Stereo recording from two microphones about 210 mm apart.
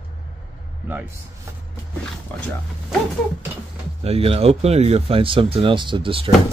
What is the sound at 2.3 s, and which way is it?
Speech, 10° left (ahead or behind).